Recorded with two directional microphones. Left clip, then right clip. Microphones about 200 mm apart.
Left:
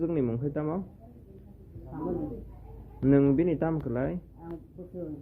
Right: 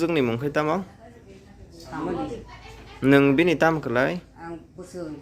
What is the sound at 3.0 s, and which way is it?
Speech, 15° right (ahead or behind).